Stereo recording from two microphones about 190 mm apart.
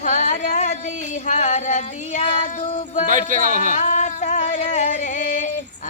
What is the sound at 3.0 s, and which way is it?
Female singing, 45° right (ahead or behind).